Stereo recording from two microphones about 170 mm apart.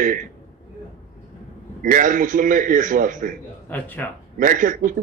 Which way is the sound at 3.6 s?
10° left (ahead or behind).